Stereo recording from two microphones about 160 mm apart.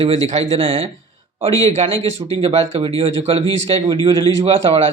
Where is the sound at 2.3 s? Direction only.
35° right (ahead or behind).